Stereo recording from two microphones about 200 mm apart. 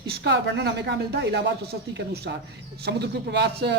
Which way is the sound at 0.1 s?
60° right (ahead or behind).